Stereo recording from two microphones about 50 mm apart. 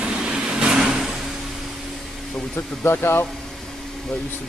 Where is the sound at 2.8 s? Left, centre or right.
Left.